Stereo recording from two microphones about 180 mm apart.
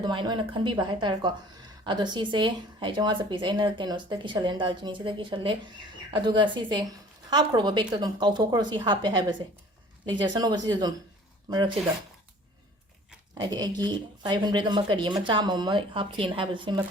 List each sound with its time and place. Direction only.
0.0 s speech: 25° right (ahead or behind)
13.3 s speech: 25° right (ahead or behind)